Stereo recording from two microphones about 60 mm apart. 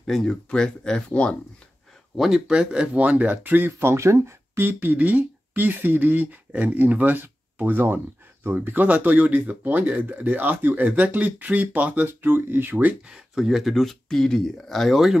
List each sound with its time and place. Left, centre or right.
0.0 s speech: centre
2.1 s speech: centre; by 3.9 s right
3.9 s speech: right
4.6 s speech: right
13.1 s speech: centre